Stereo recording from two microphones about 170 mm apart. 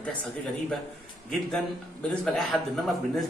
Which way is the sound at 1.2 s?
5° left (ahead or behind).